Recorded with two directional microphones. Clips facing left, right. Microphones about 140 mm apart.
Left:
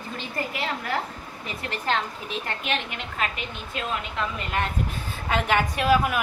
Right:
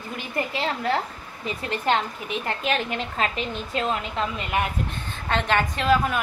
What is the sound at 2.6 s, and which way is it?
A woman's voice, 35° right (ahead or behind).